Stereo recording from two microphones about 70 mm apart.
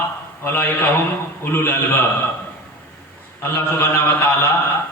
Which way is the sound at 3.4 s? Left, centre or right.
Left.